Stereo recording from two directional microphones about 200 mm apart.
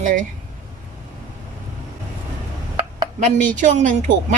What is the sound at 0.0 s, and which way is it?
Speech, 40° right (ahead or behind).